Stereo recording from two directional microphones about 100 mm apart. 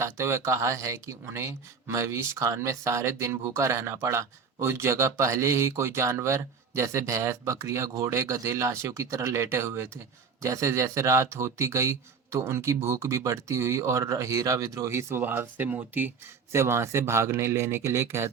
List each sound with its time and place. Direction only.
0.0 s speech: 30° right (ahead or behind)